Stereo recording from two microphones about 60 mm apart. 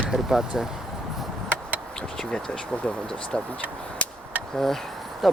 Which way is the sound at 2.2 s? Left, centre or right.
Centre.